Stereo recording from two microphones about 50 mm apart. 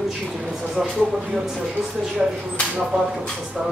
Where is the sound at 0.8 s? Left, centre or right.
Centre.